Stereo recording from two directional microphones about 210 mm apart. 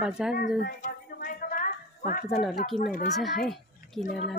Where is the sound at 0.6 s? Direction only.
40° left (ahead or behind).